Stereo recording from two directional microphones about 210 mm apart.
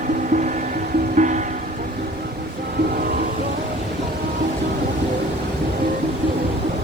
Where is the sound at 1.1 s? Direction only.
35° right (ahead or behind).